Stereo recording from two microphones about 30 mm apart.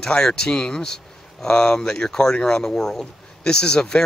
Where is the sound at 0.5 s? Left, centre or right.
Left.